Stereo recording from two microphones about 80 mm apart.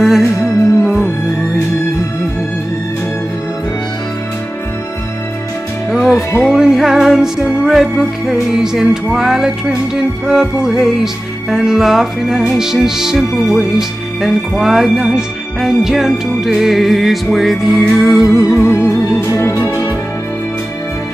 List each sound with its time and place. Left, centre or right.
0.0 s music: centre
5.9 s music: centre
18.3 s music: left